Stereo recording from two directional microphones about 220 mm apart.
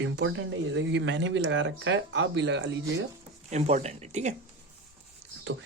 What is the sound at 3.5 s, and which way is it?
Speech, 30° right (ahead or behind).